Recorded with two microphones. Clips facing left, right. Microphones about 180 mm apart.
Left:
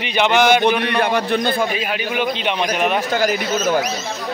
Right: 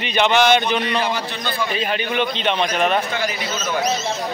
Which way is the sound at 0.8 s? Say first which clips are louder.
Left 4 dB; 60° left (ahead or behind).